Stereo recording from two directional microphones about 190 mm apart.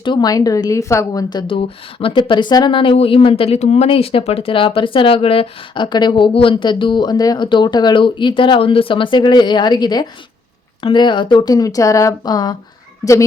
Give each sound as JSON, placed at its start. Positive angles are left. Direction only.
{"t": 0.0, "sound": "a woman's voice", "side_deg": 25}